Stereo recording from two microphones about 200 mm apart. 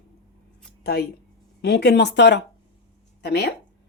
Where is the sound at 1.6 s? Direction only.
55° left (ahead or behind).